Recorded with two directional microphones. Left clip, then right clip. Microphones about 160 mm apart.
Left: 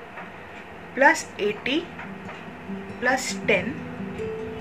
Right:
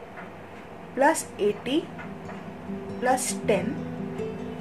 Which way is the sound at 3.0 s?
30° right (ahead or behind).